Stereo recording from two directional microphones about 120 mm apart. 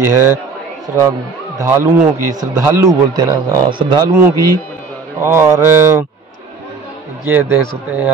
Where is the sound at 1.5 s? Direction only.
20° right (ahead or behind).